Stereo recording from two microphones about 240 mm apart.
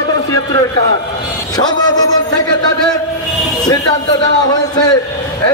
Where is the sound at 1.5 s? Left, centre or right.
Centre.